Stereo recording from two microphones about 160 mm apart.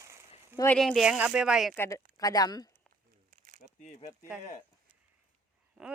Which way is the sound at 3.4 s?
50° right (ahead or behind).